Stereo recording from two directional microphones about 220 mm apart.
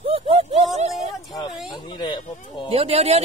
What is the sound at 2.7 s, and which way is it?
Speech, 25° right (ahead or behind).